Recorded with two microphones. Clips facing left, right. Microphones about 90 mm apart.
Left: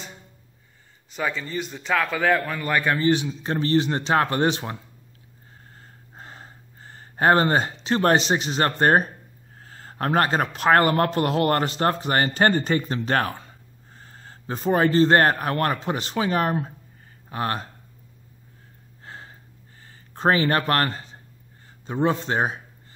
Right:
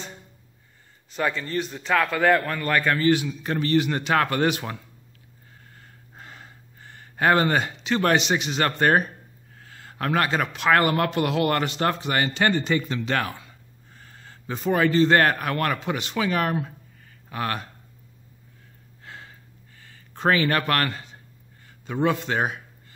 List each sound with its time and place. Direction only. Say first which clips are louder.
1.1 s a man's voice: right 2 dB; centre (ahead or behind); by 4.7 s 30° left (ahead or behind)
5.8 s gasp: left 2 dB; 35° left (ahead or behind)
9.6 s a man's voice: left 2 dB; 35° left (ahead or behind)
19.0 s a sound: left 1 dB; 35° left (ahead or behind)
21.6 s a man's voice: left 1 dB; 30° left (ahead or behind)